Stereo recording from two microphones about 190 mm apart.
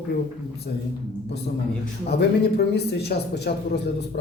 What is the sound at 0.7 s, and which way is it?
Speech, 55° left (ahead or behind).